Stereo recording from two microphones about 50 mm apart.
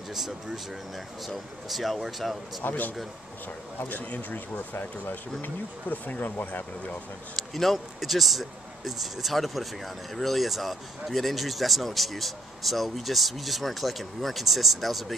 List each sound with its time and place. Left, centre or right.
0.9 s speech: centre
3.8 s speech: left
7.3 s speech: centre